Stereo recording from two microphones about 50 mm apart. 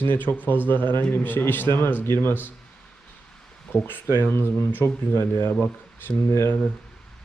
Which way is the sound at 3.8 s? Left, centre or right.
Left.